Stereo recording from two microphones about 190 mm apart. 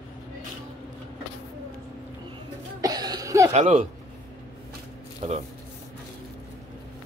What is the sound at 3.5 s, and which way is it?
Speech, 35° right (ahead or behind).